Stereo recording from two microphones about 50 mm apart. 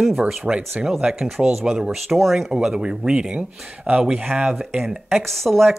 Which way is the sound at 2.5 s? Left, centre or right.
Centre.